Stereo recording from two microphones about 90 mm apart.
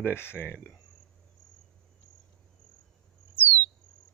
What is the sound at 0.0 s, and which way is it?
Speech, 25° left (ahead or behind).